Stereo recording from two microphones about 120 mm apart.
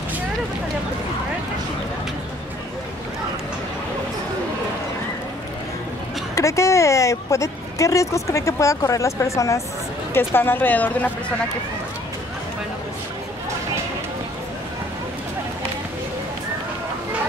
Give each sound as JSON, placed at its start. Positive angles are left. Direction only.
{"t": 6.3, "sound": "a woman's voice", "side_deg": 25}